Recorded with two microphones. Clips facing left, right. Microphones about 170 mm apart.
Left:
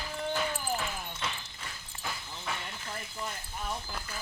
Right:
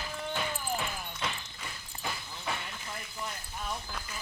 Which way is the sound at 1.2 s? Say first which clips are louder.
Right 2 dB; centre (ahead or behind).